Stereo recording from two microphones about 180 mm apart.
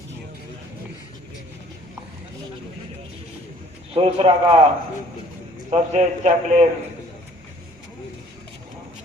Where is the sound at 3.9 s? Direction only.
35° right (ahead or behind).